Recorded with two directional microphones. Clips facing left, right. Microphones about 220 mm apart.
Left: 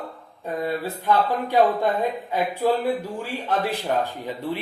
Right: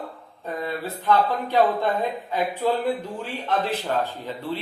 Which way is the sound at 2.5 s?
10° left (ahead or behind).